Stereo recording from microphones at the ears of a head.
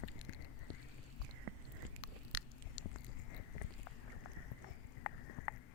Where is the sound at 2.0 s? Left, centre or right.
Left.